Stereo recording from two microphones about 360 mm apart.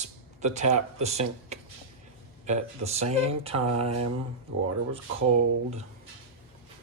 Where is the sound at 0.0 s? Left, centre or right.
Centre.